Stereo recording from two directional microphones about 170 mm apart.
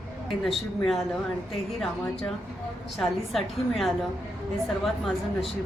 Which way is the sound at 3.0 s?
Centre (ahead or behind).